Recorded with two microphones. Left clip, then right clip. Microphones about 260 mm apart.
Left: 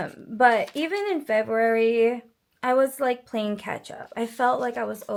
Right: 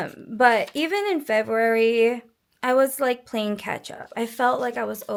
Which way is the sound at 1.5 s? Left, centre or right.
Right.